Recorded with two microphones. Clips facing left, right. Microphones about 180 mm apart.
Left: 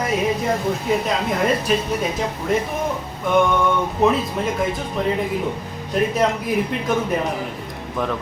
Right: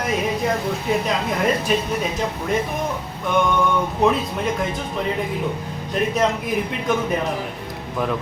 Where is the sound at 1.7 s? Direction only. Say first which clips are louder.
Left 1 dB; centre (ahead or behind).